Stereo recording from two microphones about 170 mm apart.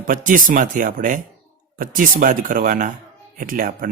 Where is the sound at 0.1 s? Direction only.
50° right (ahead or behind).